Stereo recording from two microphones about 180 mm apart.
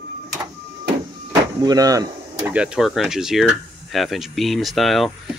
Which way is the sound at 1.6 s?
20° right (ahead or behind).